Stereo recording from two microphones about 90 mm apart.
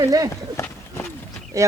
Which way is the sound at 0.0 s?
40° right (ahead or behind).